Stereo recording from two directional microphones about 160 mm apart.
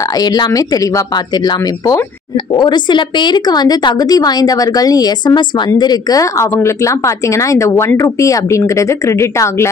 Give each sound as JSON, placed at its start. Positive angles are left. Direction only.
{"t": 0.2, "sound": "a woman's voice", "side_deg": 25}